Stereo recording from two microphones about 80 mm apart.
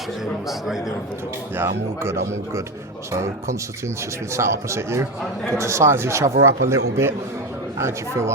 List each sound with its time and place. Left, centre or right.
0.4 s a man's voice: centre
1.5 s speech: right